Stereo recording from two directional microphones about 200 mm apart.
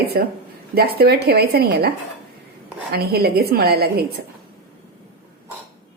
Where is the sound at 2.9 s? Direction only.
50° right (ahead or behind).